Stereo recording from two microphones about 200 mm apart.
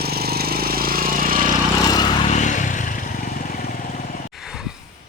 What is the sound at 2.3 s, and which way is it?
Vehicle, 40° left (ahead or behind).